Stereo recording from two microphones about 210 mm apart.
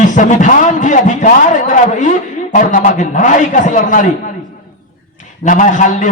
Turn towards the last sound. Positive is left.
turn(degrees=35)  # may be behind; listen again after turning